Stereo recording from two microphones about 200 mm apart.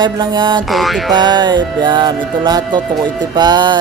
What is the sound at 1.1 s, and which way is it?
Speech, 20° right (ahead or behind).